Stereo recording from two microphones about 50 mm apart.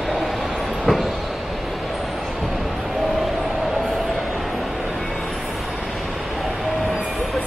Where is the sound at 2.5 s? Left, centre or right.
Centre.